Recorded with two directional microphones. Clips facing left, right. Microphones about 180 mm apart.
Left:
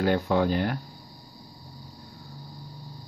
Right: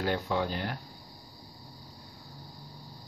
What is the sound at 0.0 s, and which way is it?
Speech, 50° left (ahead or behind).